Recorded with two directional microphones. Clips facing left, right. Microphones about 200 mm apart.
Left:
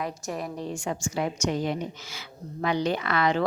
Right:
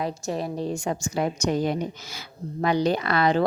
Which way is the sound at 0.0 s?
30° right (ahead or behind).